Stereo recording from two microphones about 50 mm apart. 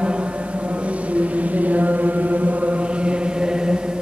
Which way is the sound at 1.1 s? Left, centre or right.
Right.